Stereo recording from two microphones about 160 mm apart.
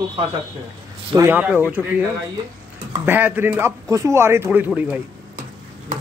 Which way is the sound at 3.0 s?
15° right (ahead or behind).